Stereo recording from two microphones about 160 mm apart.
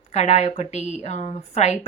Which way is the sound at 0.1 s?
45° left (ahead or behind).